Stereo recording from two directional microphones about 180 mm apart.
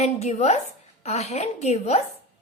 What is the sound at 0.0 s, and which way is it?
A woman's voice, 40° left (ahead or behind).